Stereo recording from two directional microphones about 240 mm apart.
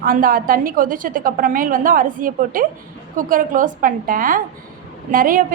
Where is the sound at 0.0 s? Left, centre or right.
Right.